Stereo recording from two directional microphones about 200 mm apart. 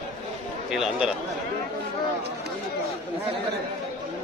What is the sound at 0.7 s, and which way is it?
Speech, 5° right (ahead or behind).